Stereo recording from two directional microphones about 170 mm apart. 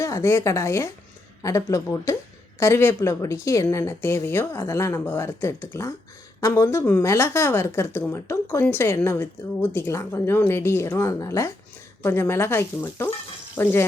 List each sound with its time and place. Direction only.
0.0 s a woman's voice: 20° left (ahead or behind)